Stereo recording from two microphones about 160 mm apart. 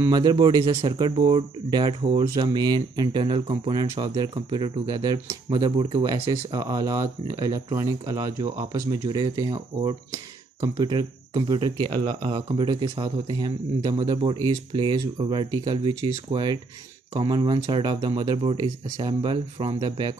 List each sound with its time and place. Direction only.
0.0 s speech: 25° right (ahead or behind)